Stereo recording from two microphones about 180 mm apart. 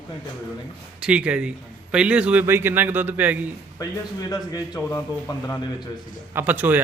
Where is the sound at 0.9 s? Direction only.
5° right (ahead or behind).